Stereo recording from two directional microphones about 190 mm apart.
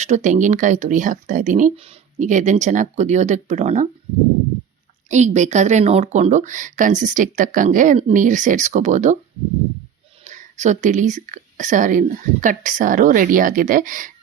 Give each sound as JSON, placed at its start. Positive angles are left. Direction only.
{"t": 0.0, "sound": "a woman's voice", "side_deg": -40}
{"t": 5.0, "sound": "a woman's voice", "side_deg": -40}
{"t": 10.2, "sound": "speech", "side_deg": -40}